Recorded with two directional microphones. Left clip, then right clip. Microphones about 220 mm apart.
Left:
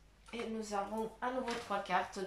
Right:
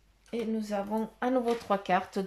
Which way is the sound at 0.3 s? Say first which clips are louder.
Right 7 dB; 40° right (ahead or behind).